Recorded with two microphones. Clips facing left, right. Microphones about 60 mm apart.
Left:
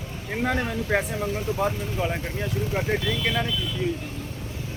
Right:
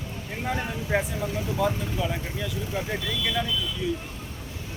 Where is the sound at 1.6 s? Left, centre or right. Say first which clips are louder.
Right 2 dB; left.